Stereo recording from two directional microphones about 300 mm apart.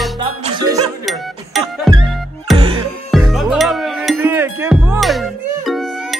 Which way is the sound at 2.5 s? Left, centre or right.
Centre.